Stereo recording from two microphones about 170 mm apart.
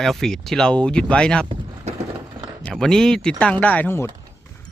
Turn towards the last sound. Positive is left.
turn(degrees=15)  # may be behind; listen again after turning